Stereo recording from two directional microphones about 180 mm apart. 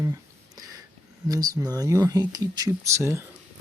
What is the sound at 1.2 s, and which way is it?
Speech, 20° right (ahead or behind).